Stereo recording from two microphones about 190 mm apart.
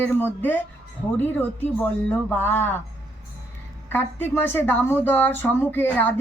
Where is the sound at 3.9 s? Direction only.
10° left (ahead or behind).